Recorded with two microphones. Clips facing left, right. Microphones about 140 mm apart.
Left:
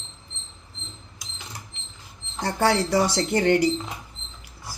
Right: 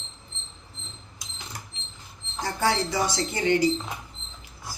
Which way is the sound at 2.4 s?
65° left (ahead or behind).